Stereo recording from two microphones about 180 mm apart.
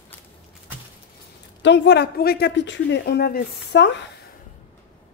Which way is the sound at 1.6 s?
75° left (ahead or behind).